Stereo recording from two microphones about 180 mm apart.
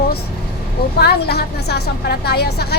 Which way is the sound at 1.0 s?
65° left (ahead or behind).